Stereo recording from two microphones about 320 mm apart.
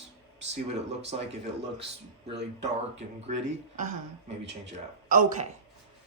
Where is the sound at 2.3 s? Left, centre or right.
Right.